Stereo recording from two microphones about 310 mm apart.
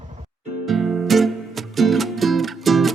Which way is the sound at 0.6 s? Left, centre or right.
Centre.